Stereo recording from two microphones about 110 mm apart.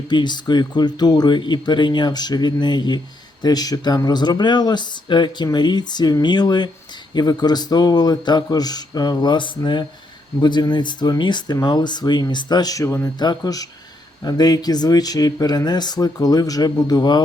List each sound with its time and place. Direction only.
0.1 s speech: 45° left (ahead or behind); by 13.1 s 25° left (ahead or behind)
13.1 s speech: 40° left (ahead or behind)